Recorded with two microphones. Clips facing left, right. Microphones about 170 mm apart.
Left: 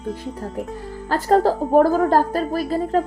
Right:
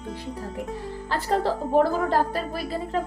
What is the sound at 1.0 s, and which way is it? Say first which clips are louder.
A woman's voice: left 8 dB; 45° left (ahead or behind).